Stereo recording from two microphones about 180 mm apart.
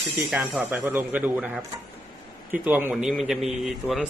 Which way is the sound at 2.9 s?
Centre (ahead or behind).